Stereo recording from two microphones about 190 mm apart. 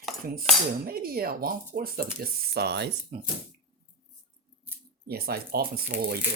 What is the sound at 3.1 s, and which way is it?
Speech, 40° right (ahead or behind).